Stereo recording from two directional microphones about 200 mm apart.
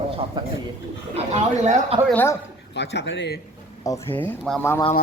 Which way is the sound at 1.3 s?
35° right (ahead or behind).